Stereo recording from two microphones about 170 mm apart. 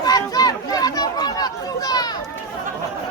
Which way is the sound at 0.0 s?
20° left (ahead or behind).